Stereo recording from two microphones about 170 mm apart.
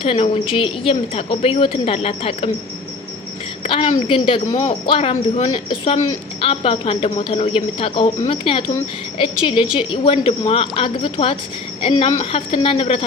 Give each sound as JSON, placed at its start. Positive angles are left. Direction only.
{"t": 0.0, "sound": "speech", "side_deg": 35}
{"t": 3.6, "sound": "a woman's voice", "side_deg": 30}